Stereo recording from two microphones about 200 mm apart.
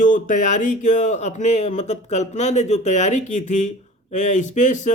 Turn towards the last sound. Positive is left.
turn(degrees=35)  # may be behind; listen again after turning